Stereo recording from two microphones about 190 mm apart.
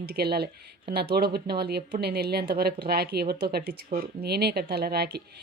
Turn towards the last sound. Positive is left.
turn(degrees=-60)  # may be behind; listen again after turning